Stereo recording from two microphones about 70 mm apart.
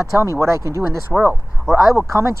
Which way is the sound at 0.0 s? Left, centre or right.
Right.